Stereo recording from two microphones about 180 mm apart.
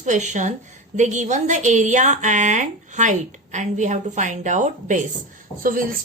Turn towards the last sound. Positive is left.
turn(degrees=-50)  # may be behind; listen again after turning